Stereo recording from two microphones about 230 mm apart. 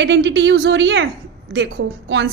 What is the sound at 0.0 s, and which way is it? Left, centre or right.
A woman's voice, right.